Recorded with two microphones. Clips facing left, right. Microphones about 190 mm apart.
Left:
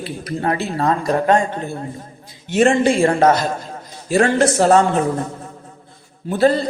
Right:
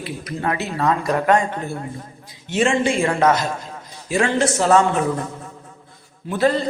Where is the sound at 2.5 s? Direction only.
45° left (ahead or behind).